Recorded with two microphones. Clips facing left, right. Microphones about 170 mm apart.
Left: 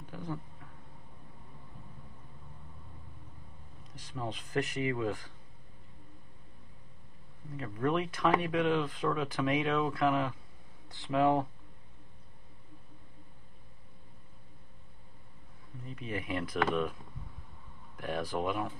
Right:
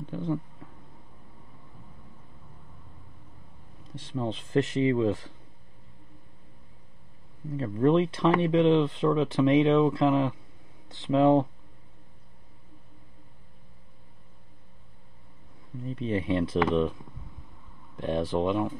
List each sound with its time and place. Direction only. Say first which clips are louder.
0.1 s speech: right 9 dB; 25° right (ahead or behind)
3.8 s speech: right 8 dB; 25° right (ahead or behind)
7.5 s speech: right 9 dB; 30° right (ahead or behind)
15.9 s speech: right 9 dB; 30° right (ahead or behind)
17.9 s speech: right 7 dB; 25° right (ahead or behind)